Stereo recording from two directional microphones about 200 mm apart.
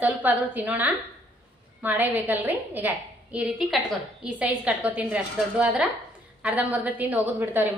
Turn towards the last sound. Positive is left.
turn(degrees=-10)  # may be behind; listen again after turning